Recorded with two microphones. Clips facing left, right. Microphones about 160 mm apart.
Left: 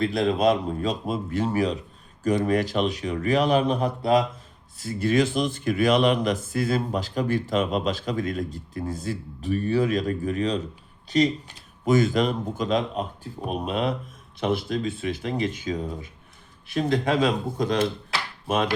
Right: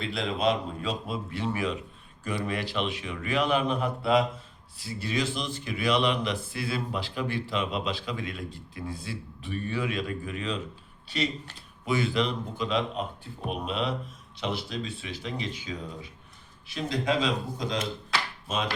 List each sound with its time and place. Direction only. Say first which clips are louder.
0.0 s speech: left 6 dB; 40° left (ahead or behind)
4.8 s speech: left 8 dB; 50° left (ahead or behind)
18.4 s wood: left 10 dB; 60° left (ahead or behind)